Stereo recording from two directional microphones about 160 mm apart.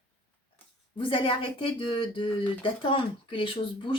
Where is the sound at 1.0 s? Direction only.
30° left (ahead or behind).